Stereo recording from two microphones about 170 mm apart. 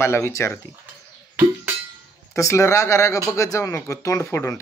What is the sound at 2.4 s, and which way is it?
Speech, 15° left (ahead or behind).